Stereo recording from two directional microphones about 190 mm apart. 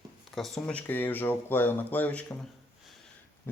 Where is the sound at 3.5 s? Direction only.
10° left (ahead or behind).